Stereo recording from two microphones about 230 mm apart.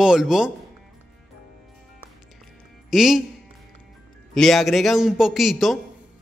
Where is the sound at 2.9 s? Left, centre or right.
Centre.